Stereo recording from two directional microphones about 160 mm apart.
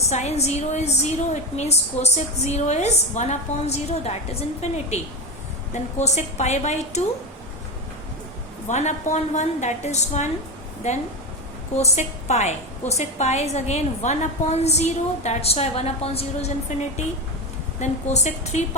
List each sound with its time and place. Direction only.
0.1 s a woman's voice: 45° left (ahead or behind)
8.6 s a woman's voice: 45° left (ahead or behind)